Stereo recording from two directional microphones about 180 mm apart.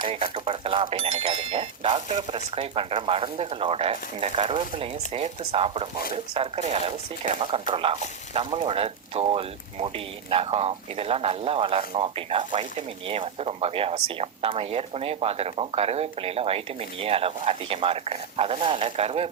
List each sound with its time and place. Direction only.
0.0 s speech: 30° right (ahead or behind)